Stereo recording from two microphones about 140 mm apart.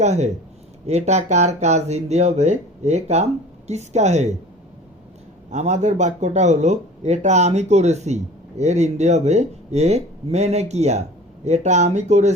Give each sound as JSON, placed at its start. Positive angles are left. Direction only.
{"t": 0.0, "sound": "a woman's voice", "side_deg": -55}
{"t": 5.5, "sound": "speech", "side_deg": -55}